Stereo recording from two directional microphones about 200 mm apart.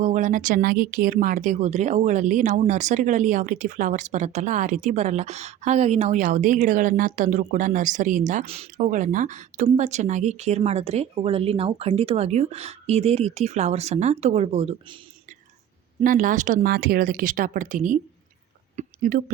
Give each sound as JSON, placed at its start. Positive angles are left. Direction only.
{"t": 0.0, "sound": "speech", "side_deg": -40}
{"t": 16.0, "sound": "speech", "side_deg": -40}
{"t": 18.8, "sound": "whispering", "side_deg": -40}